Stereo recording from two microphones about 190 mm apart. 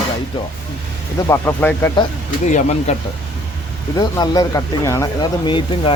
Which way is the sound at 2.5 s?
35° left (ahead or behind).